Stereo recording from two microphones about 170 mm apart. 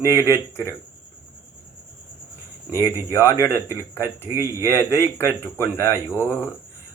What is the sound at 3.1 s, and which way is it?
Speech, 15° left (ahead or behind).